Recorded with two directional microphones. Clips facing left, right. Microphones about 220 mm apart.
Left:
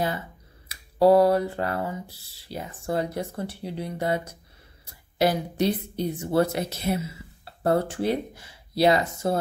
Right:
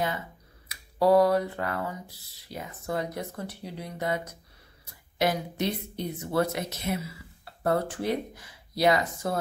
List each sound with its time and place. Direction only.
0.7 s a woman's voice: 30° left (ahead or behind)